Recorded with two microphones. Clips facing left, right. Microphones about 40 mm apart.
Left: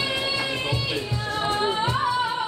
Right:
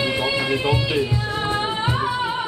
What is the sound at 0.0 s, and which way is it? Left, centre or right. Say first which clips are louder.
Music: right 4 dB; right.